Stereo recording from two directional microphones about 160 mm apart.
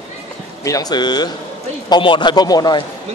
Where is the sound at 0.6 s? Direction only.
25° left (ahead or behind).